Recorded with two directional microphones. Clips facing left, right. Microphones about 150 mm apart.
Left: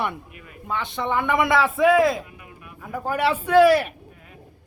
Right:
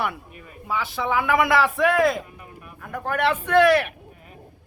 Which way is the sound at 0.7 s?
5° right (ahead or behind).